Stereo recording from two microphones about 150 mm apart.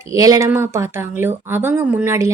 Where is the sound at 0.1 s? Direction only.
20° right (ahead or behind).